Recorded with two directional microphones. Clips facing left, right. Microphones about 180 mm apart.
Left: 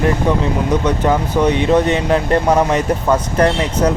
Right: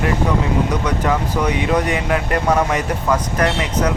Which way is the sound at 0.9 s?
25° left (ahead or behind).